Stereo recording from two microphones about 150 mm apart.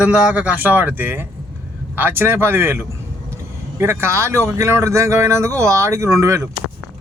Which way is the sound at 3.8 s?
15° right (ahead or behind).